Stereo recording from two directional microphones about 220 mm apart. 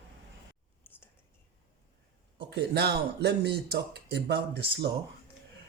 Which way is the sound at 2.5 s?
50° right (ahead or behind).